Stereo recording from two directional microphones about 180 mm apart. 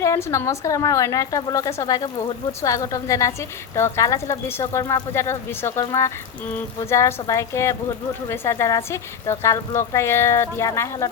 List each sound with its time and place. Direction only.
0.0 s a woman's voice: 15° left (ahead or behind)